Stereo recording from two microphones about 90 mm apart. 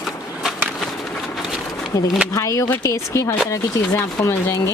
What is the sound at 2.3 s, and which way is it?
Speech, 35° left (ahead or behind).